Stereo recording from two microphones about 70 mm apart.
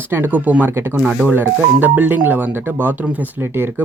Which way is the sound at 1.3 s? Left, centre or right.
Right.